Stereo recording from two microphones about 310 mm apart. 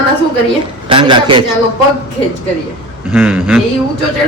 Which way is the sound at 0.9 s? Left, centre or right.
Centre.